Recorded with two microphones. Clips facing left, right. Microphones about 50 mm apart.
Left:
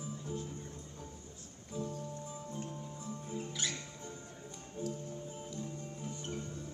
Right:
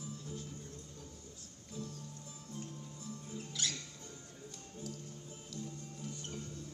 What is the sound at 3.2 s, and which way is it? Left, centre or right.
Music, left.